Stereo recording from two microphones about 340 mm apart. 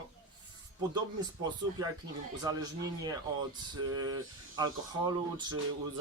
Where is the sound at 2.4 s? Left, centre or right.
Centre.